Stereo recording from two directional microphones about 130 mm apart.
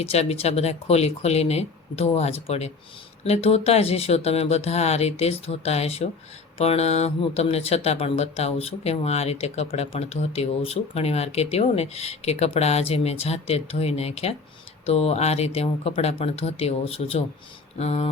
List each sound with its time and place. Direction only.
0.0 s speech: 50° left (ahead or behind)